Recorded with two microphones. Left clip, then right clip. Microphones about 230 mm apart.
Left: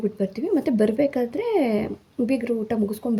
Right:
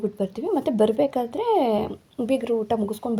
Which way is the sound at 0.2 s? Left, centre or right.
Centre.